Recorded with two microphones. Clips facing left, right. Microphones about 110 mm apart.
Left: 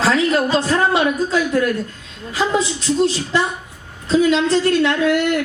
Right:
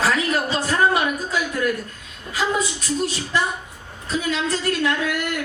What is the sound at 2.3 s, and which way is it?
A woman's voice, 25° left (ahead or behind).